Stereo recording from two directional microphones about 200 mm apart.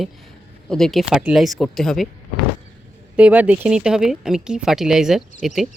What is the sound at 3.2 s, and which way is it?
Speech, 5° right (ahead or behind).